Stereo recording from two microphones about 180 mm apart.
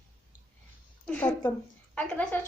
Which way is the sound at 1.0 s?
10° left (ahead or behind).